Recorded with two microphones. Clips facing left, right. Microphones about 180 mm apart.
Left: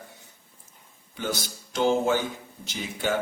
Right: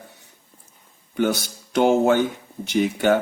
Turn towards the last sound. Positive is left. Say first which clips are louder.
# right 10 dB
turn(degrees=-60)  # may be behind; listen again after turning